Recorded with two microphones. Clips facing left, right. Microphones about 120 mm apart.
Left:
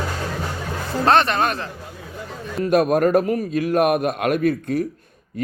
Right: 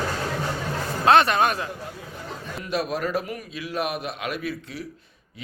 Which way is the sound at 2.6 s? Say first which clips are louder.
Left 11 dB; 50° left (ahead or behind).